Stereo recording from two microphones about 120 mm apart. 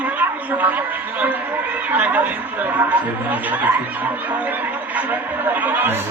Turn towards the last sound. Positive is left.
turn(degrees=-15)  # may be behind; listen again after turning